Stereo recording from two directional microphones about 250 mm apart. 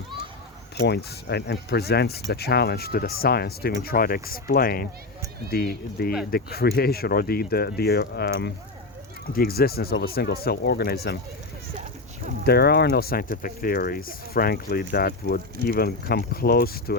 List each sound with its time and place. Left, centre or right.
0.8 s speech: left
12.5 s speech: left